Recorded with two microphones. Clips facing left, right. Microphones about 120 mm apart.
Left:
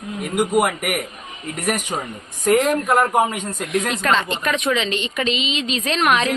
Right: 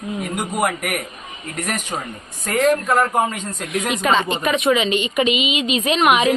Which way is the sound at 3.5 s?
Centre (ahead or behind).